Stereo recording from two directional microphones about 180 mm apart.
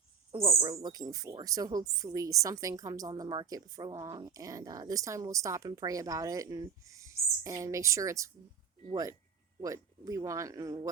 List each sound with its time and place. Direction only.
0.4 s a woman's voice: 20° right (ahead or behind)
9.6 s speech: 20° right (ahead or behind)